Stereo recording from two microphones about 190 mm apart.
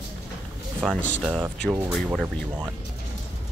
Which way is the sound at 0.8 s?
Centre (ahead or behind).